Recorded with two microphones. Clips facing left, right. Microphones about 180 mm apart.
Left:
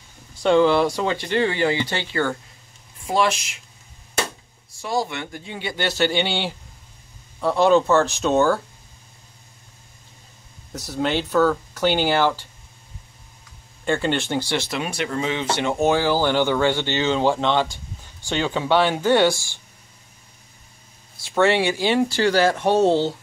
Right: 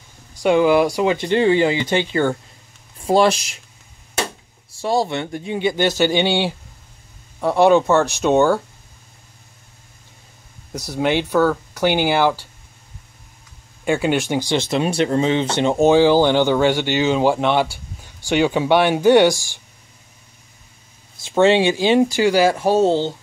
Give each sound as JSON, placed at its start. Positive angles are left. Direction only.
{"t": 0.4, "sound": "speech", "side_deg": -10}
{"t": 3.1, "sound": "speech", "side_deg": -35}
{"t": 4.8, "sound": "speech", "side_deg": -30}
{"t": 10.7, "sound": "speech", "side_deg": -10}
{"t": 13.8, "sound": "speech", "side_deg": -10}
{"t": 21.2, "sound": "speech", "side_deg": -20}